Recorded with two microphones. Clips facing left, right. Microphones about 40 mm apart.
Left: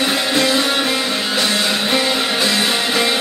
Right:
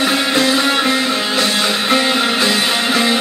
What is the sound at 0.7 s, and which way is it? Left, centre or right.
Music, centre.